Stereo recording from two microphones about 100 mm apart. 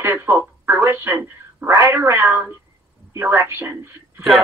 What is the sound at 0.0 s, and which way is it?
Speech, 20° right (ahead or behind).